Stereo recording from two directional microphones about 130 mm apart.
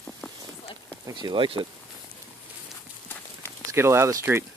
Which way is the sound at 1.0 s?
35° right (ahead or behind).